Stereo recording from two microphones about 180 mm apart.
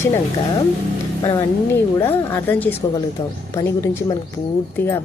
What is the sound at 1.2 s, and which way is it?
Speech, 25° left (ahead or behind).